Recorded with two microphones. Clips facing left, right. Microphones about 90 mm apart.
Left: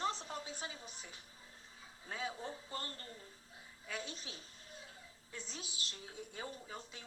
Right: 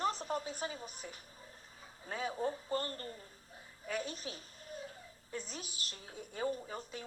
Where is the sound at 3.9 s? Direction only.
45° right (ahead or behind).